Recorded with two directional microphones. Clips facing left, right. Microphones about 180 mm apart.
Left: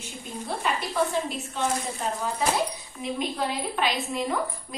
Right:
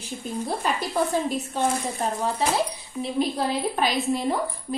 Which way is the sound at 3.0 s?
35° right (ahead or behind).